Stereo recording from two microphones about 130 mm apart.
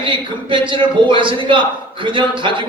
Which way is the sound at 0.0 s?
40° right (ahead or behind).